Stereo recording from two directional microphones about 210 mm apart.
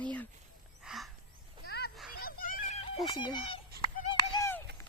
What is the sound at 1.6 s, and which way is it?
Children playing, 50° left (ahead or behind).